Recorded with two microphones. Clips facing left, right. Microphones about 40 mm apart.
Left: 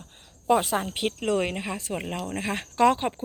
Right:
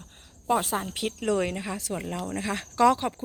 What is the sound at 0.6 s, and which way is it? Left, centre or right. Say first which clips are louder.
Speech: left 3 dB; left.